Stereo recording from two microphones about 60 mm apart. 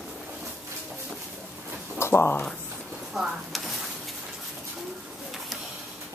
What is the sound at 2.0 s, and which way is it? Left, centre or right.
Speech, left.